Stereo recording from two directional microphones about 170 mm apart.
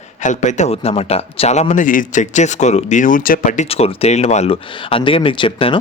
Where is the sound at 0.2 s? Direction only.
45° left (ahead or behind).